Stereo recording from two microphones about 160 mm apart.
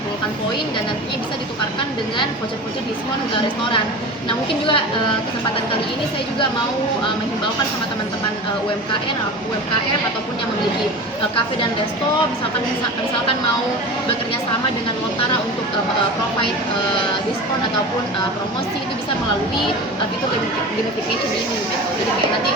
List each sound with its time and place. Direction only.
4.3 s a woman's voice: 35° left (ahead or behind)